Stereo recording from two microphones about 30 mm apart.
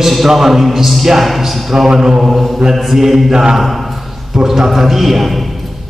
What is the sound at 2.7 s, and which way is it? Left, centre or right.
A man's voice, centre.